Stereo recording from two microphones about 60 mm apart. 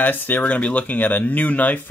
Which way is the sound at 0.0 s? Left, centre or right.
Left.